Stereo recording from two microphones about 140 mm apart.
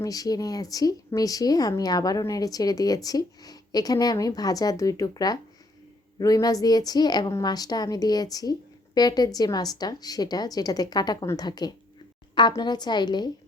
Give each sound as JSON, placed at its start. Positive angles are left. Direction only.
{"t": 0.0, "sound": "a woman's voice", "side_deg": 25}